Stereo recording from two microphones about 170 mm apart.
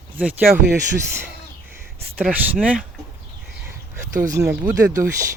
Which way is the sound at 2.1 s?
10° right (ahead or behind).